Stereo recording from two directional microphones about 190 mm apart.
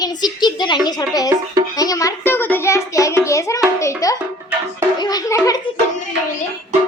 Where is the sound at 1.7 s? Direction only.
20° left (ahead or behind).